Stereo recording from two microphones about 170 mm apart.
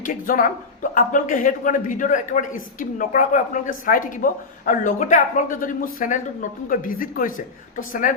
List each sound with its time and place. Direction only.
0.0 s speech: 55° left (ahead or behind)